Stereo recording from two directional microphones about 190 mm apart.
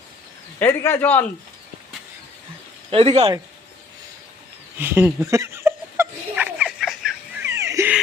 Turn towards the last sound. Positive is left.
turn(degrees=-15)  # may be behind; listen again after turning